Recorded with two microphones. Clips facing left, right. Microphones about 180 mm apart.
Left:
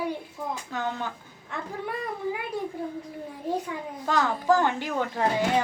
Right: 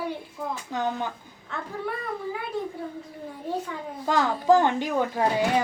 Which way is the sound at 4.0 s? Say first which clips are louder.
Right 2 dB; 15° right (ahead or behind).